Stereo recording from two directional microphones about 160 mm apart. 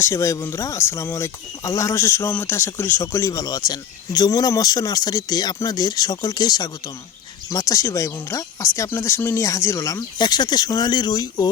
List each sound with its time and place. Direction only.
0.0 s speech: 15° left (ahead or behind)